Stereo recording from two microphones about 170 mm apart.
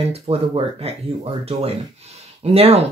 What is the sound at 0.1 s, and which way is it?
Speech, 35° right (ahead or behind).